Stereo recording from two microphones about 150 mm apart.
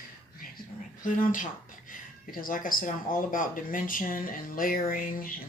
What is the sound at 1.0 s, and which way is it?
Speech, 60° left (ahead or behind).